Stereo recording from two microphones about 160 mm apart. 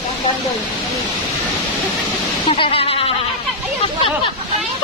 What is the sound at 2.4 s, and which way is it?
Music, 35° left (ahead or behind).